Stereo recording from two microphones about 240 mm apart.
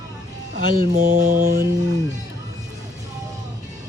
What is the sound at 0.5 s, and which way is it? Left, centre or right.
Speech, right.